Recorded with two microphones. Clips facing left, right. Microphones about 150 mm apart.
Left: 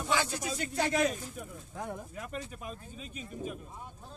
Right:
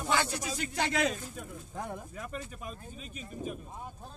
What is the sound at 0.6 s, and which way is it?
Speech, 90° right.